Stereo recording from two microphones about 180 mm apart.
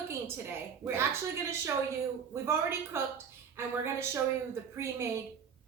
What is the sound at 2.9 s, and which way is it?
A woman's voice, 15° right (ahead or behind).